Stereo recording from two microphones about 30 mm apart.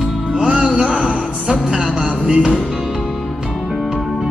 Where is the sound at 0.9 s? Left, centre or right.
Right.